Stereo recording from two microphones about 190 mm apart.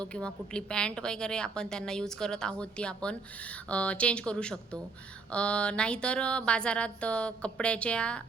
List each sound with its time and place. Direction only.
0.0 s a woman's voice: 5° left (ahead or behind)